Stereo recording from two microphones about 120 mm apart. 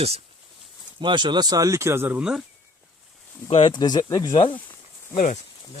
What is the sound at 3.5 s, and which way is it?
Speech, 45° left (ahead or behind).